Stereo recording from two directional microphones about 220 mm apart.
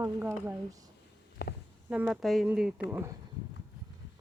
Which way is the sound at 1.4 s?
45° left (ahead or behind).